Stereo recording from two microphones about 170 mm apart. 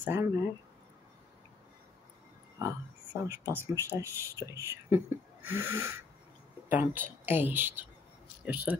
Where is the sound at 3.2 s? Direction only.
15° right (ahead or behind).